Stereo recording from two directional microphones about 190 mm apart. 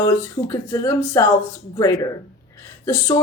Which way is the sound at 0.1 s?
15° left (ahead or behind).